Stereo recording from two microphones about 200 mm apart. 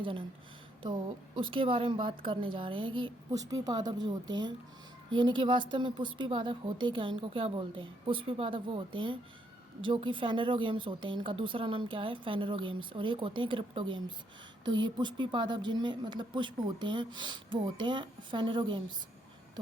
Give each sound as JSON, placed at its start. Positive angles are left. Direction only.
{"t": 0.0, "sound": "a woman's voice", "side_deg": -25}
{"t": 1.4, "sound": "a woman's voice", "side_deg": -25}